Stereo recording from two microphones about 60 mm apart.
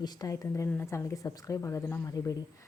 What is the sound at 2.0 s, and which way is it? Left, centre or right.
Speech, left.